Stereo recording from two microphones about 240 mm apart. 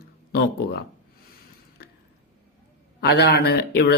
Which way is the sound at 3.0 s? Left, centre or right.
Left.